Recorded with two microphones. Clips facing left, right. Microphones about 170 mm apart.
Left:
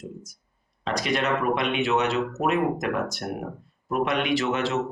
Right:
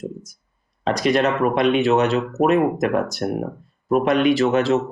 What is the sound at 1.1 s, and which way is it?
Speech, 40° right (ahead or behind).